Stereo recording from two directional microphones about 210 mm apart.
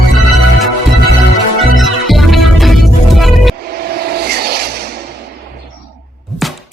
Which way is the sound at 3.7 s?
50° right (ahead or behind).